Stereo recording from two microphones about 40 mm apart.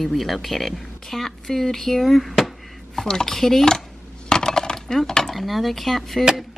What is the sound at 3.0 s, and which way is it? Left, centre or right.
Speech, centre.